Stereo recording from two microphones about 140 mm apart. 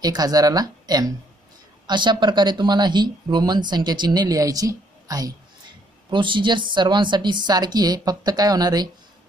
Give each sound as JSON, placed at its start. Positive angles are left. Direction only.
{"t": 0.0, "sound": "speech", "side_deg": -25}
{"t": 6.0, "sound": "speech", "side_deg": -35}